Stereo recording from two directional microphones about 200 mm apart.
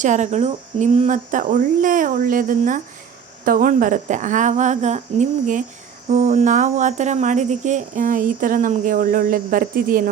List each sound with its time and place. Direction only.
0.0 s speech: 35° right (ahead or behind)